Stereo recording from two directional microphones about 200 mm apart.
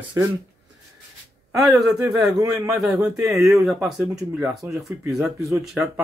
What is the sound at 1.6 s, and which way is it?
Speech, centre (ahead or behind).